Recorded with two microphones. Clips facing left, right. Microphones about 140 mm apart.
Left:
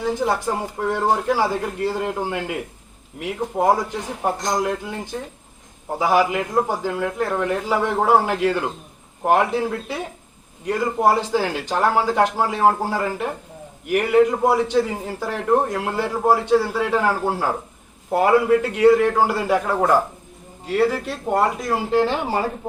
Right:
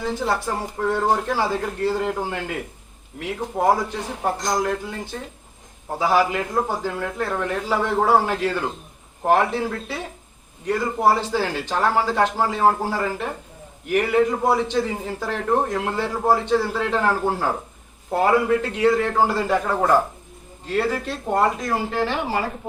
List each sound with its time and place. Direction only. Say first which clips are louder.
0.0 s a man's voice: left 2 dB; 15° left (ahead or behind)
6.0 s a man's voice: left 1 dB; 15° left (ahead or behind)
21.8 s speech: left 4 dB; 20° left (ahead or behind)